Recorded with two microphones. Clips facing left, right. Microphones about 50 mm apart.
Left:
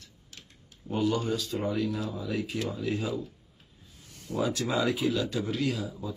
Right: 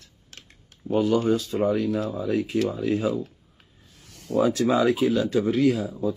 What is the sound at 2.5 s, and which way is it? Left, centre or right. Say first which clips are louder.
Speech: right 11 dB; right.